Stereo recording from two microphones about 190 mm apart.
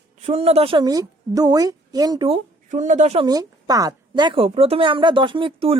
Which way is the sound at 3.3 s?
20° right (ahead or behind).